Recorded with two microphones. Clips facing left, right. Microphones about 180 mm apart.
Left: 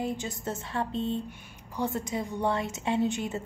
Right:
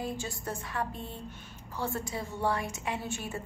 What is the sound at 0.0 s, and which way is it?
A woman's voice, 20° left (ahead or behind).